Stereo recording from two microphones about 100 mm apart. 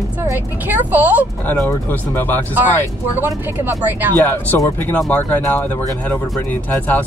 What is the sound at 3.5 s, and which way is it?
Speech, 20° right (ahead or behind).